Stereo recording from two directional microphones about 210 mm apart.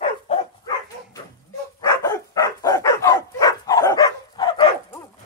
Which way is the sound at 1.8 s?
15° left (ahead or behind).